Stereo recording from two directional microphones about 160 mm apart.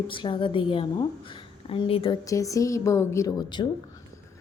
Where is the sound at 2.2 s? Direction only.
20° left (ahead or behind).